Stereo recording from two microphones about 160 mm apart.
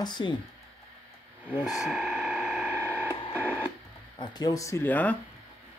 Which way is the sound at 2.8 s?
10° right (ahead or behind).